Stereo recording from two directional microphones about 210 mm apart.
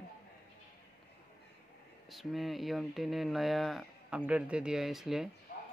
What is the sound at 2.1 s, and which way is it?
Speech, centre (ahead or behind).